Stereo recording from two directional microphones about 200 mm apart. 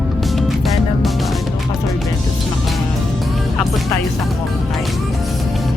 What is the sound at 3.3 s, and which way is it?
Music, centre (ahead or behind).